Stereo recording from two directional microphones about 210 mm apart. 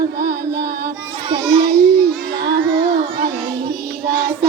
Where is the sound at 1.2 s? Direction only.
20° right (ahead or behind).